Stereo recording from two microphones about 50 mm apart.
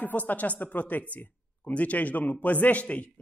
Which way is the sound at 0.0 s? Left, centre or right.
Left.